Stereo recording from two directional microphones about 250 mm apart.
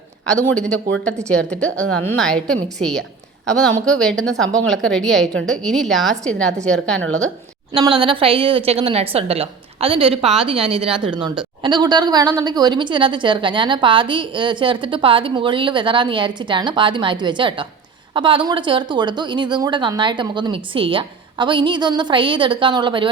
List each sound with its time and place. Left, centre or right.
1.3 s a woman's voice: centre
7.7 s a woman's voice: right